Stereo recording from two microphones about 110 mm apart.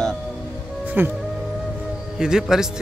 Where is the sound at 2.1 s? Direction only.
5° right (ahead or behind).